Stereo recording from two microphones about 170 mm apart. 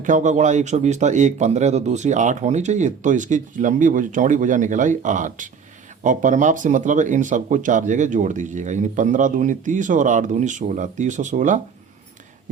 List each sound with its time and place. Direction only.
0.0 s speech: 45° right (ahead or behind)